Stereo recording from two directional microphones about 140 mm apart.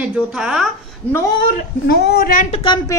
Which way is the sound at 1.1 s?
20° left (ahead or behind).